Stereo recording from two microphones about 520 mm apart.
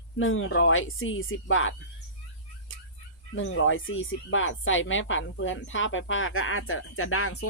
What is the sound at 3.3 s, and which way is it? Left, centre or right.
Speech, left.